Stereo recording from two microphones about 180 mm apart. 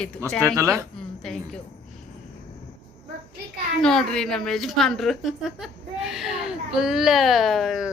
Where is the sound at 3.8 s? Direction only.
5° left (ahead or behind).